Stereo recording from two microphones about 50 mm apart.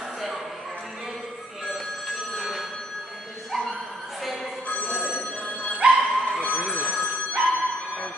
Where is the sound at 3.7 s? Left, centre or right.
Centre.